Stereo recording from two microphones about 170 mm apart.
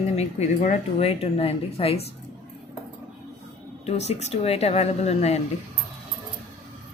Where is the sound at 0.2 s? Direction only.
40° left (ahead or behind).